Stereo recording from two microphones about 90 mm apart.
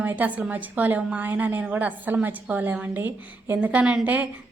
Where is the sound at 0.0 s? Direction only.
20° right (ahead or behind).